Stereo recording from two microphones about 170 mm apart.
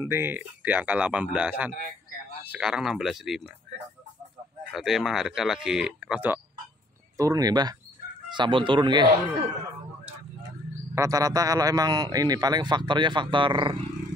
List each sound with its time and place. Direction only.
0.0 s speech: 15° right (ahead or behind)
4.7 s speech: centre (ahead or behind)
7.2 s speech: 20° right (ahead or behind)
11.0 s speech: 20° right (ahead or behind)